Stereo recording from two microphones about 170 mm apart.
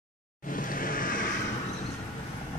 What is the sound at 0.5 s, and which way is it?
Vehicle, 55° left (ahead or behind).